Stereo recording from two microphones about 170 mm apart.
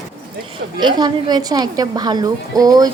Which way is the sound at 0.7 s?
25° right (ahead or behind).